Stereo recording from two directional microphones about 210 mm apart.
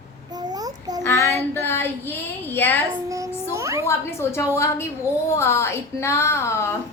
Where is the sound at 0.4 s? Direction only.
20° right (ahead or behind).